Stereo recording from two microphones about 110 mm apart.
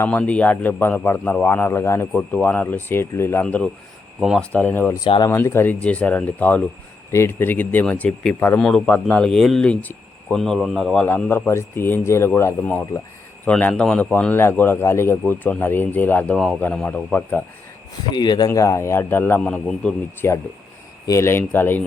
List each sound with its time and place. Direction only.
0.0 s a man's voice: 10° left (ahead or behind)
3.4 s a man's voice: 5° left (ahead or behind)
5.0 s speech: 50° left (ahead or behind)
5.3 s speech: 25° left (ahead or behind); by 11.0 s centre (ahead or behind)
11.0 s a man's voice: 15° left (ahead or behind)
13.4 s a man's voice: 15° left (ahead or behind)
16.3 s speech: centre (ahead or behind)
16.6 s speech: 10° left (ahead or behind)
18.1 s a man's voice: 40° left (ahead or behind); by 19.4 s 20° left (ahead or behind)
19.4 s speech: 10° left (ahead or behind)
20.2 s a man's voice: 20° left (ahead or behind)